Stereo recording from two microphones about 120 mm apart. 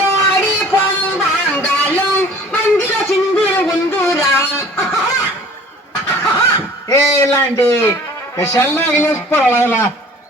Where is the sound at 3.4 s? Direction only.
20° left (ahead or behind).